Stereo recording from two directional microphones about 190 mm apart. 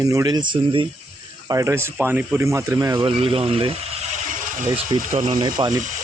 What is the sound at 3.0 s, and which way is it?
Speech, 30° right (ahead or behind).